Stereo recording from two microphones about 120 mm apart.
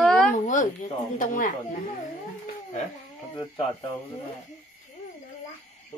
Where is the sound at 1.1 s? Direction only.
90° left.